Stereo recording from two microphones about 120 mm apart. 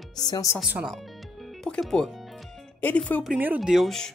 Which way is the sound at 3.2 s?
10° right (ahead or behind).